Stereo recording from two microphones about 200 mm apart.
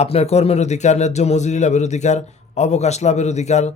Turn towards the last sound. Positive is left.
turn(degrees=35)  # may be behind; listen again after turning